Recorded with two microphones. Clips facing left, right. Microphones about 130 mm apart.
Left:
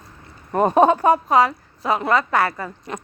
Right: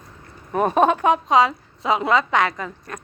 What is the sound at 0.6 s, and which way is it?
Speech, 15° left (ahead or behind).